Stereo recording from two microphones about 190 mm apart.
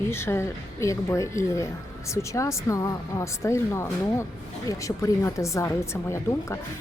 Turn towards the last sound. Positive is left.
turn(degrees=15)  # may be behind; listen again after turning